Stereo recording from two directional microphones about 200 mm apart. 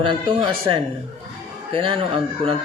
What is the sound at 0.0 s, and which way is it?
Speech, 25° right (ahead or behind).